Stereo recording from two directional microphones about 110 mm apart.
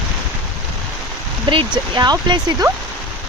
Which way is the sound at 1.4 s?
45° right (ahead or behind).